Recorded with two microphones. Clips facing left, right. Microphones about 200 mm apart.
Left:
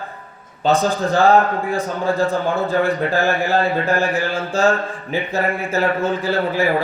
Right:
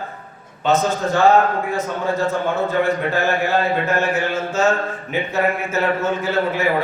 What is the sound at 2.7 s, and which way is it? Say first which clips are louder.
A man's voice: left 1 dB; 35° left (ahead or behind).